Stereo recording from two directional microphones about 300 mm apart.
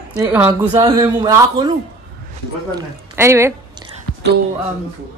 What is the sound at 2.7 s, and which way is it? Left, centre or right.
A woman's voice, centre.